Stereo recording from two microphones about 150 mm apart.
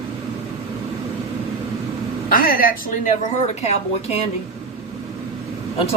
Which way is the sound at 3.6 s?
45° left (ahead or behind).